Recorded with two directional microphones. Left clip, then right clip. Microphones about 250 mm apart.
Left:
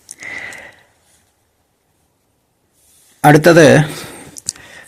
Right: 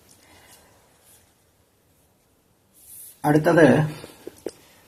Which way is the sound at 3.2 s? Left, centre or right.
Left.